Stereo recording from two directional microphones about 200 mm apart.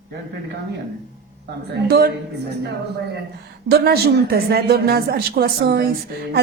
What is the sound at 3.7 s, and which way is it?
A woman's voice, 50° right (ahead or behind).